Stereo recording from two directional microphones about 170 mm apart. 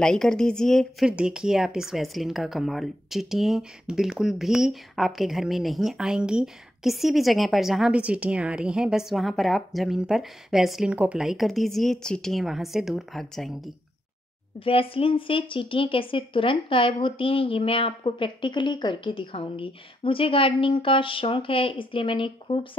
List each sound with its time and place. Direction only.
0.0 s speech: 5° left (ahead or behind)
14.6 s a woman's voice: 35° left (ahead or behind)